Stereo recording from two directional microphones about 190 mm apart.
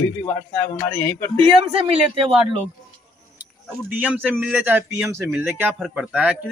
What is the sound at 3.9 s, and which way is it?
A man's voice, 10° right (ahead or behind).